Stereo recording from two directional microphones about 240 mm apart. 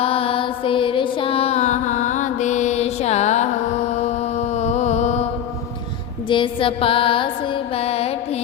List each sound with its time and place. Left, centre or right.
0.0 s music: left
6.2 s mantra: left